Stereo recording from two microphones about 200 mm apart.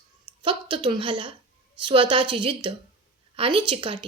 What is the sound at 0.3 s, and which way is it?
A woman's voice, 25° right (ahead or behind).